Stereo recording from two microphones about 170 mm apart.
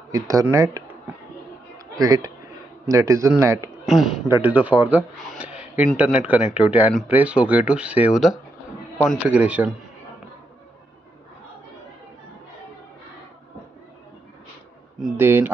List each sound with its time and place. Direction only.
0.1 s speech: 20° right (ahead or behind)
2.0 s speech: 20° right (ahead or behind)
3.8 s speech: centre (ahead or behind)
5.3 s a sound: 5° right (ahead or behind)
5.9 s speech: 5° right (ahead or behind)
15.1 s speech: 10° right (ahead or behind)